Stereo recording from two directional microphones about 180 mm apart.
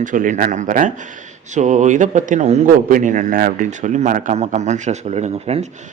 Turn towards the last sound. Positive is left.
turn(degrees=-35)  # may be behind; listen again after turning